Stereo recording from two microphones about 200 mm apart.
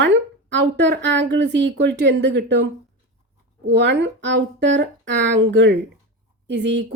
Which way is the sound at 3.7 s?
60° right (ahead or behind).